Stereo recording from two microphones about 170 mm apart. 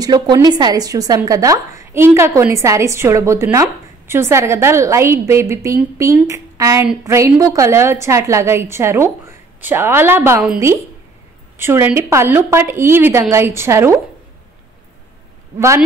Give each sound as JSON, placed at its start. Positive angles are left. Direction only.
{"t": 0.0, "sound": "a woman's voice", "side_deg": -25}
{"t": 11.5, "sound": "a woman's voice", "side_deg": -15}